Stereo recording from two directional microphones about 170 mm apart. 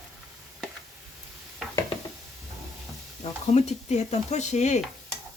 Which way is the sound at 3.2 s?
40° left (ahead or behind).